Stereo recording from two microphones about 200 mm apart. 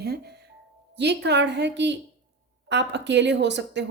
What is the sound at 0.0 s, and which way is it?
Music, 55° right (ahead or behind).